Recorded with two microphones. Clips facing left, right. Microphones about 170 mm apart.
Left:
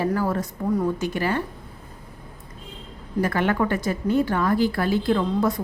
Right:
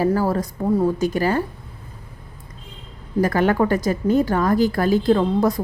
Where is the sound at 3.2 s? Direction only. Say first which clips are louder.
Right 4 dB; 40° right (ahead or behind).